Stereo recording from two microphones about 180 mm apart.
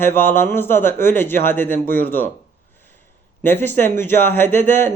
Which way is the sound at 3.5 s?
10° left (ahead or behind).